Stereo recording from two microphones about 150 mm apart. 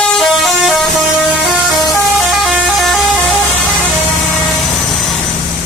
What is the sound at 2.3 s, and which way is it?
Vehicle, centre (ahead or behind).